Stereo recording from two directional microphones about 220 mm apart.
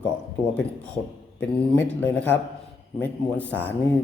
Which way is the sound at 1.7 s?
10° left (ahead or behind).